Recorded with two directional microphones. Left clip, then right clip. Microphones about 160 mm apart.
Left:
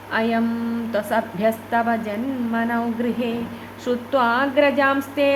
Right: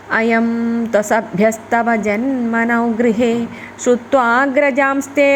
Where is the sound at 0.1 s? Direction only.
40° right (ahead or behind).